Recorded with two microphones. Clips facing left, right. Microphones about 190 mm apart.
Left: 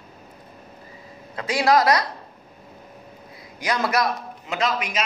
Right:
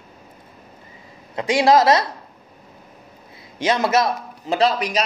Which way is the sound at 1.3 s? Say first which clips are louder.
Right 4 dB; 25° right (ahead or behind).